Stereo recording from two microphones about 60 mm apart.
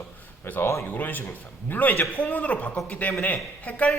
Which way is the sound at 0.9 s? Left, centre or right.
Left.